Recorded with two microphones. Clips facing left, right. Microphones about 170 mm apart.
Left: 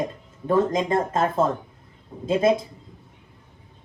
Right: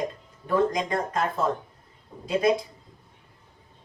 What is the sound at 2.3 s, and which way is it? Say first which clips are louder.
Speech: left 3 dB; 25° left (ahead or behind).